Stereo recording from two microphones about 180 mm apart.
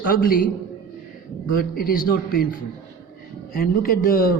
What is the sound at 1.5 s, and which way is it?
Speech, 55° left (ahead or behind).